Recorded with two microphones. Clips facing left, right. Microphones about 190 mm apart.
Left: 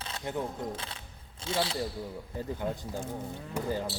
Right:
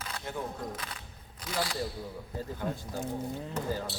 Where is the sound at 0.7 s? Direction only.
30° left (ahead or behind).